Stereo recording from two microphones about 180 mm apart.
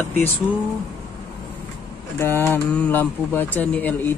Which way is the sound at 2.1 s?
15° left (ahead or behind).